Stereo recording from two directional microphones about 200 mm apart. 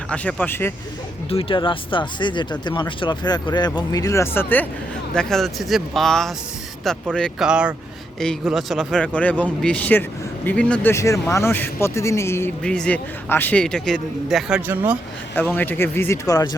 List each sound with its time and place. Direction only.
0.1 s speech: 10° left (ahead or behind)
1.3 s a man's voice: 25° left (ahead or behind); by 14.9 s 5° right (ahead or behind)
15.4 s speech: 10° left (ahead or behind)